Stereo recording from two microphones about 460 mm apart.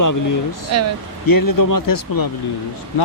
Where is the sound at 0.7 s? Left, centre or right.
Right.